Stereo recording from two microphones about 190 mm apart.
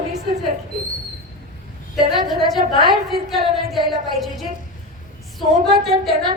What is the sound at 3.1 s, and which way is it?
A woman's voice, centre (ahead or behind).